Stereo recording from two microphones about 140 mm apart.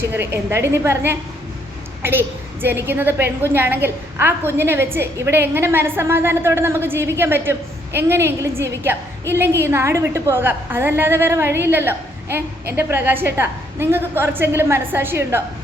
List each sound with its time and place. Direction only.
0.0 s a woman's voice: 15° right (ahead or behind)